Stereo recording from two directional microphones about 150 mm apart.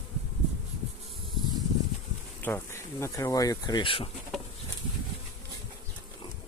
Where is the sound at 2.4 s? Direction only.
10° left (ahead or behind); by 4.1 s 35° left (ahead or behind).